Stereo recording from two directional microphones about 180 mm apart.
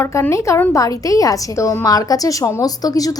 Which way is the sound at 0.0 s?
15° left (ahead or behind).